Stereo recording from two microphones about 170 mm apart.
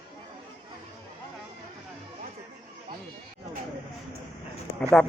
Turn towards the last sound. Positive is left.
turn(degrees=5)  # may be behind; listen again after turning